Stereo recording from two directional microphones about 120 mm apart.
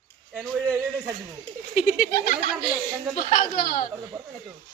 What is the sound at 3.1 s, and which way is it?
Speech, 90° left.